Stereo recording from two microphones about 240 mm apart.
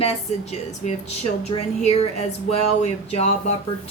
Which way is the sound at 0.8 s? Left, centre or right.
Left.